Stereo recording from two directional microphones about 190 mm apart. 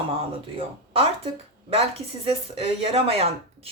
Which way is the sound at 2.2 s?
30° right (ahead or behind).